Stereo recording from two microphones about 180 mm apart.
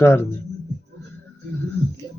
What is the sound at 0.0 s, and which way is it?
Speech, 15° left (ahead or behind).